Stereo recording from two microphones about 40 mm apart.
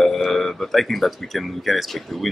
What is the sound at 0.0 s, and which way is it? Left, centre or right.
Speech, centre.